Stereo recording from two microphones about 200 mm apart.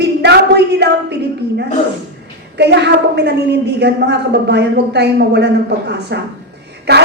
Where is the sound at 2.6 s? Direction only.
55° right (ahead or behind).